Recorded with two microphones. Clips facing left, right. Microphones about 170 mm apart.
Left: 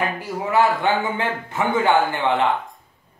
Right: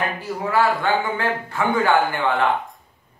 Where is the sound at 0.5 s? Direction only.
20° left (ahead or behind).